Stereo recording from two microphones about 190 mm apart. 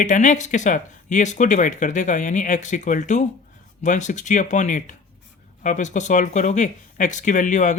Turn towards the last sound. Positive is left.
turn(degrees=40)  # may be behind; listen again after turning